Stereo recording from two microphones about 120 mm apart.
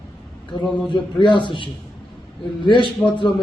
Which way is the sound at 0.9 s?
40° left (ahead or behind).